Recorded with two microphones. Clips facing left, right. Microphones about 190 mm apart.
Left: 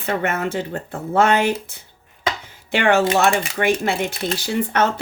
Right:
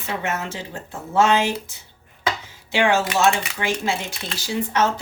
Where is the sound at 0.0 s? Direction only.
55° left (ahead or behind).